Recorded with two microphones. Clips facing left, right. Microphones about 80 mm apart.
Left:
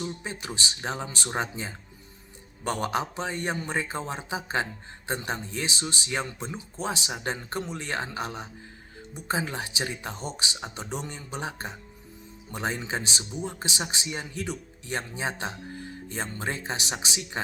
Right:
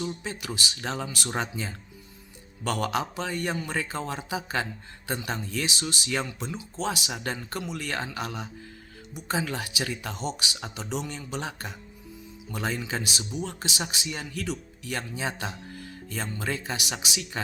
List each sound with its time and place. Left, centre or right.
0.0 s speech: left